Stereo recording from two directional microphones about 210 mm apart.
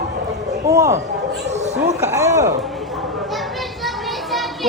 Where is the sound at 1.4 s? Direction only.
35° right (ahead or behind).